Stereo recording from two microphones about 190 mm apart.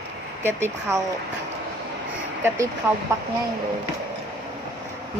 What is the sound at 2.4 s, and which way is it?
Speech, 15° right (ahead or behind).